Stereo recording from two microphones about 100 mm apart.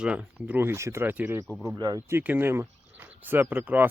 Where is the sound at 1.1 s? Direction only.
15° right (ahead or behind).